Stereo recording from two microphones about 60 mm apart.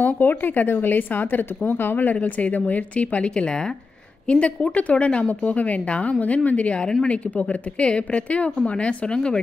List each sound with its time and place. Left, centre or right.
0.0 s a woman's voice: left; by 9.4 s centre